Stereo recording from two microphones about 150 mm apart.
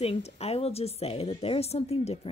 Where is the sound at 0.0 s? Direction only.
40° left (ahead or behind).